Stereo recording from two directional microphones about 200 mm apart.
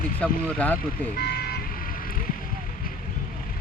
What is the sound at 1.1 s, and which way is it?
Speech, 50° left (ahead or behind).